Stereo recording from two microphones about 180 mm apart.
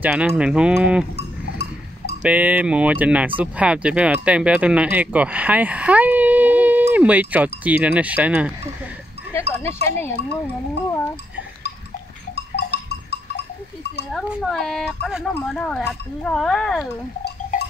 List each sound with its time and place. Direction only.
0.0 s speech: 5° right (ahead or behind)
1.1 s cowbell: 65° left (ahead or behind)
2.2 s speech: 10° right (ahead or behind)
9.5 s speech: 15° left (ahead or behind)
12.4 s goat: 65° left (ahead or behind)
14.1 s speech: centre (ahead or behind)
17.5 s a sound: 45° left (ahead or behind)